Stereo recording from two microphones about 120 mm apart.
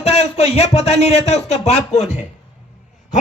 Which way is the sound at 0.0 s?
60° left (ahead or behind).